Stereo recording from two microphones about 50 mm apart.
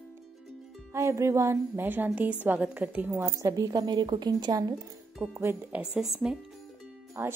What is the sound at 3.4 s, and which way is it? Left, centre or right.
Speech, right.